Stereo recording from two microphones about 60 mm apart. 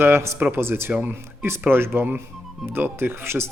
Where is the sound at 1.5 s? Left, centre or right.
Right.